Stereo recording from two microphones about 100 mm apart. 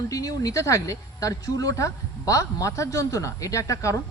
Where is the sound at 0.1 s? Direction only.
35° left (ahead or behind).